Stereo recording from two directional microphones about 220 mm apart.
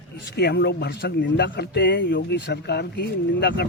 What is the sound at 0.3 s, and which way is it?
Speech, 50° left (ahead or behind).